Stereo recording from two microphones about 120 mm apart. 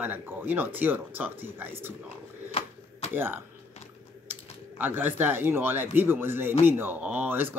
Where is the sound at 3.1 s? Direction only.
20° right (ahead or behind).